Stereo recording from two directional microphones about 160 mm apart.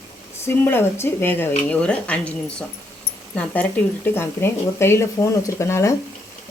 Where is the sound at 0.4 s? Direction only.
15° left (ahead or behind).